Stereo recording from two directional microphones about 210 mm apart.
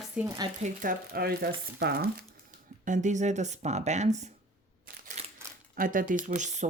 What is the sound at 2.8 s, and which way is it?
Speech, 35° right (ahead or behind).